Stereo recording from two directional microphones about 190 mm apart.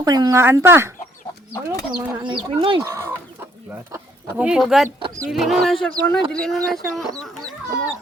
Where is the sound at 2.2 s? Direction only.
25° right (ahead or behind).